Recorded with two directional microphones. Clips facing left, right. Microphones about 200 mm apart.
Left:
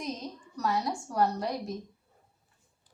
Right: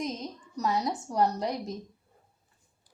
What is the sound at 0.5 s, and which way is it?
Speech, 20° right (ahead or behind).